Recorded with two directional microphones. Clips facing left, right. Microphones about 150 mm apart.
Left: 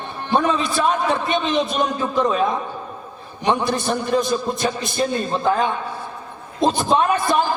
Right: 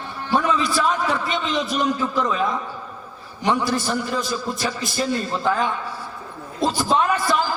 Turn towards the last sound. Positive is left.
turn(degrees=20)  # may be behind; listen again after turning